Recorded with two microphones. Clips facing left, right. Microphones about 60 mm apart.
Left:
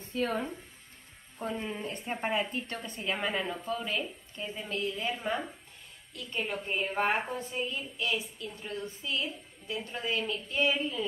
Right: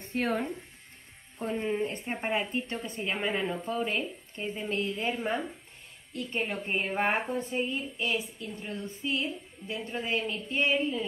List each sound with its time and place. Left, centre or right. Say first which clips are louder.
0.0 s speech: right 2 dB; right
1.4 s a woman's voice: right 5 dB; right